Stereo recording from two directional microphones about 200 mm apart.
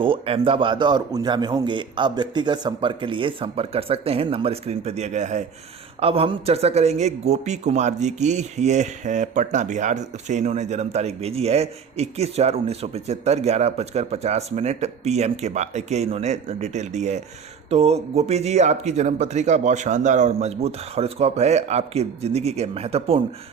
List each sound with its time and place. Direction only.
0.0 s a man's voice: 25° right (ahead or behind)